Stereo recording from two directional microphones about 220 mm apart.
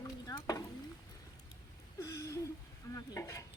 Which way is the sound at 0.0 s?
15° left (ahead or behind).